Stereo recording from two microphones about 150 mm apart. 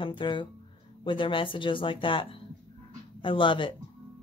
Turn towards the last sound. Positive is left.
turn(degrees=35)  # may be behind; listen again after turning